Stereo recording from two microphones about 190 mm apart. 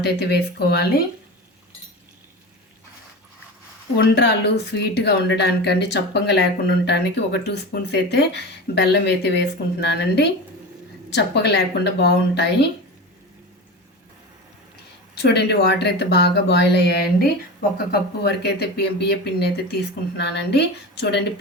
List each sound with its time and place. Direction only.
0.0 s speech: 60° left (ahead or behind)
3.9 s speech: 65° left (ahead or behind)
15.1 s speech: 60° left (ahead or behind)